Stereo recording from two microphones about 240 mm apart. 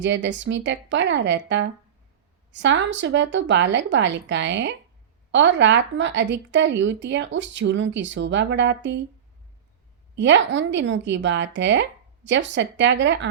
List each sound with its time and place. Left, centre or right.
0.0 s a woman's voice: right
10.2 s a woman's voice: right